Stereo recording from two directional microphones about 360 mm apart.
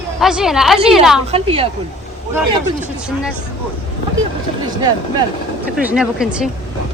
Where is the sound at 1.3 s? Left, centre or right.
Centre.